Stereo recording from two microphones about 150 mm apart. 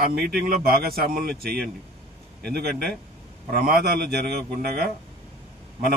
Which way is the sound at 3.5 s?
90° right.